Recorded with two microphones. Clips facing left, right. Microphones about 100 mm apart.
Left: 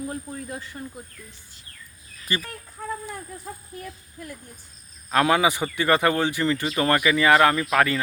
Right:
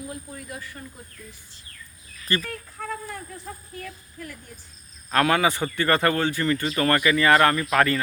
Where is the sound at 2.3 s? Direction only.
10° left (ahead or behind).